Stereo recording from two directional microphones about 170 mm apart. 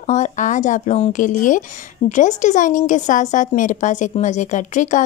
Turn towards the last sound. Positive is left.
turn(degrees=45)  # may be behind; listen again after turning